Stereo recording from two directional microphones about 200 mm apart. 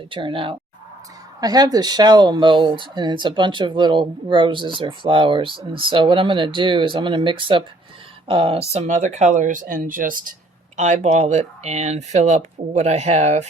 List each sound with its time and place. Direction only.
0.1 s speech: 25° right (ahead or behind)